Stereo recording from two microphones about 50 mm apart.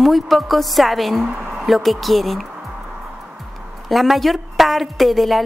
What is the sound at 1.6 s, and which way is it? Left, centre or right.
Speech, centre.